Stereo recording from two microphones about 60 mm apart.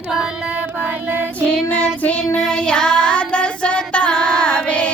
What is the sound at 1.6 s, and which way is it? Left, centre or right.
Child singing, left.